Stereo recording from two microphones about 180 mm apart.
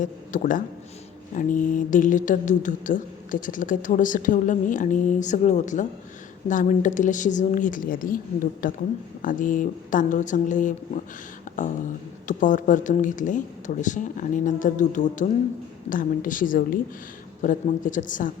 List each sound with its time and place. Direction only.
0.0 s a woman's voice: 45° left (ahead or behind)
11.5 s a sound: 45° left (ahead or behind)
12.3 s a woman's voice: 45° left (ahead or behind)